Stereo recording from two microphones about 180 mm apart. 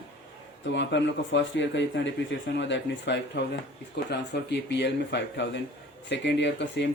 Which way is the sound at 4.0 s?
70° left (ahead or behind).